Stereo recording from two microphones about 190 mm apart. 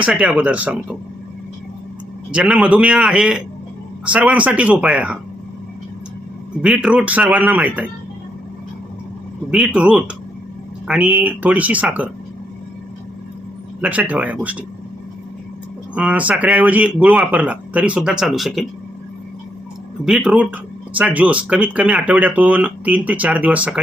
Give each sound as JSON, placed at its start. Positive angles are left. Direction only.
{"t": 0.1, "sound": "speech", "side_deg": -5}
{"t": 2.3, "sound": "a man's voice", "side_deg": -5}
{"t": 6.6, "sound": "speech", "side_deg": -5}
{"t": 9.5, "sound": "a man's voice", "side_deg": -5}
{"t": 13.8, "sound": "speech", "side_deg": -5}
{"t": 16.0, "sound": "speech", "side_deg": -5}
{"t": 20.1, "sound": "a man's voice", "side_deg": -5}